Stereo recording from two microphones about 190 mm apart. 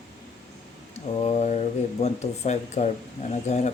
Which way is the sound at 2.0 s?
35° left (ahead or behind).